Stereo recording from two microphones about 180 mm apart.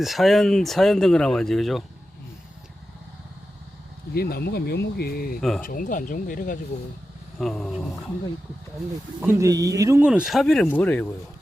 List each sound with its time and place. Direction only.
0.0 s speech: centre (ahead or behind)
4.1 s speech: 60° left (ahead or behind)
5.4 s speech: 5° left (ahead or behind)
5.6 s speech: 50° left (ahead or behind)
7.3 s speech: centre (ahead or behind)
9.2 s speech: 15° right (ahead or behind)
10.1 s speech: 5° right (ahead or behind)